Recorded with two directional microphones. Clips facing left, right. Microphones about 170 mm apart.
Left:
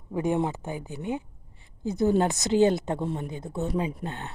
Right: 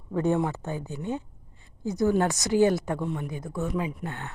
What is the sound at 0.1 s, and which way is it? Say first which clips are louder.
Speech: right 1 dB; 15° left (ahead or behind).